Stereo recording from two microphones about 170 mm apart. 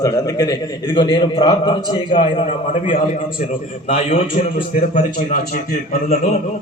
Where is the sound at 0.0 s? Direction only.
20° left (ahead or behind).